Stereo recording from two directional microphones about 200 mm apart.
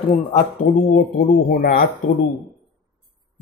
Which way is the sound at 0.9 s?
45° left (ahead or behind).